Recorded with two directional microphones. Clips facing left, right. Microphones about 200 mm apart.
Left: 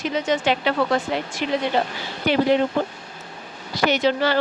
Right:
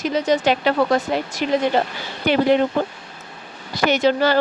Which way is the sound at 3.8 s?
45° right (ahead or behind).